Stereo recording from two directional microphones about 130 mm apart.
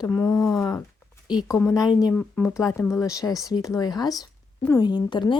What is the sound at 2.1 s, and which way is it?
Speech, 10° left (ahead or behind).